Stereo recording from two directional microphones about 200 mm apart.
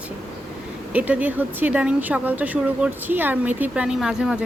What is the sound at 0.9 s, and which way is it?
Speech, 5° right (ahead or behind).